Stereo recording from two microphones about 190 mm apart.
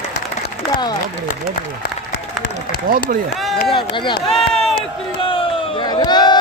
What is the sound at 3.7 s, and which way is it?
Speech, 25° left (ahead or behind).